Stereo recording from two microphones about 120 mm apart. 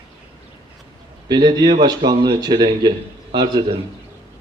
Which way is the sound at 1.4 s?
35° right (ahead or behind).